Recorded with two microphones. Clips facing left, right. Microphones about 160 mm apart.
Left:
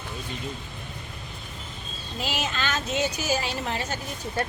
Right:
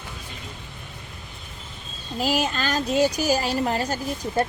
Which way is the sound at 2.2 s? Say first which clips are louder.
Right 6 dB; 40° right (ahead or behind).